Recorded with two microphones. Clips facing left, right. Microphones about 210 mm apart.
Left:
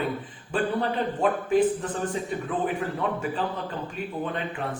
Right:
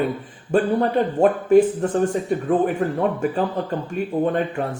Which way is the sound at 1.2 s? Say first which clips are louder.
Right 8 dB; 45° right (ahead or behind).